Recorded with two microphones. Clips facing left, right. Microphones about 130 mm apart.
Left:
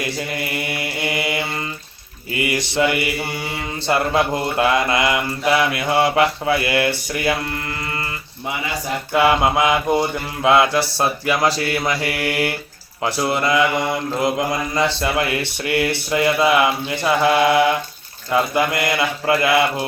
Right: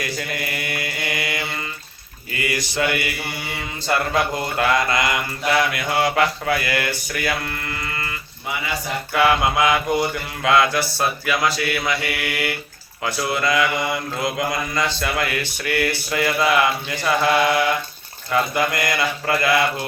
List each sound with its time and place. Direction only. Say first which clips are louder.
0.0 s mantra: left 2 dB; 30° left (ahead or behind)
9.1 s mantra: left 2 dB; 25° left (ahead or behind)